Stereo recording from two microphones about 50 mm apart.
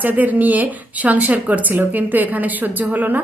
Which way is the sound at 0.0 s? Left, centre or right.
Right.